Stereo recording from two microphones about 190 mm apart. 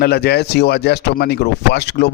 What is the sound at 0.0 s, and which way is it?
Speech, 55° left (ahead or behind).